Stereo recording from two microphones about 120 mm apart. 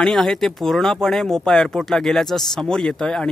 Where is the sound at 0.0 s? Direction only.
5° left (ahead or behind).